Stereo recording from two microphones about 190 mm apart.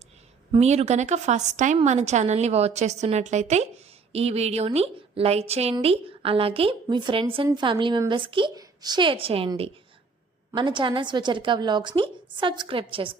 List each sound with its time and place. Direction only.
0.5 s a woman's voice: 35° right (ahead or behind)